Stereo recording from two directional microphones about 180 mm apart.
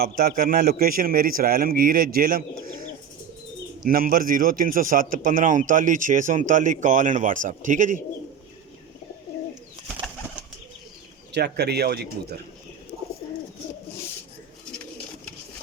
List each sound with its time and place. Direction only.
0.0 s a man's voice: 55° right (ahead or behind)
3.8 s a man's voice: 50° right (ahead or behind)
11.3 s speech: 65° right (ahead or behind)